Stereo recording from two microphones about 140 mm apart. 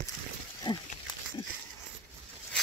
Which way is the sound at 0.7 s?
30° left (ahead or behind).